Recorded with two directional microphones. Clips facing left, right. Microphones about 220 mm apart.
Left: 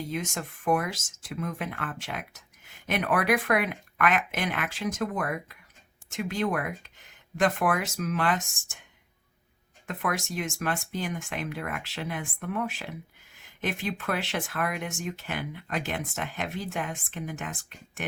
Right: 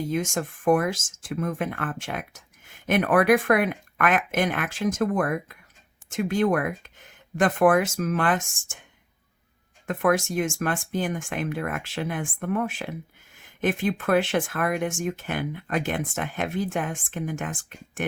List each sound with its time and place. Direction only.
0.1 s speech: 50° right (ahead or behind)
9.8 s speech: 50° right (ahead or behind)